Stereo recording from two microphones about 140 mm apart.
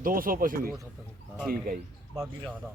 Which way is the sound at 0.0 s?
90° right.